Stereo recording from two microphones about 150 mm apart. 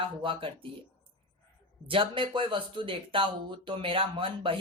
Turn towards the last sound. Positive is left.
turn(degrees=-35)  # may be behind; listen again after turning